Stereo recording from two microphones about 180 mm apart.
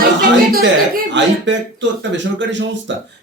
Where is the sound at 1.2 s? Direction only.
85° right.